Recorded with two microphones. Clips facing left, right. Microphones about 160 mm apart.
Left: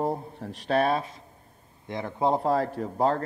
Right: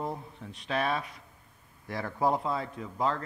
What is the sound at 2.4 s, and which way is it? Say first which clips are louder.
Speech: left 8 dB; 45° left (ahead or behind).